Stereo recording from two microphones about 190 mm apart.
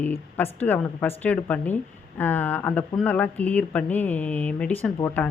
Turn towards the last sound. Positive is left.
turn(degrees=10)  # may be behind; listen again after turning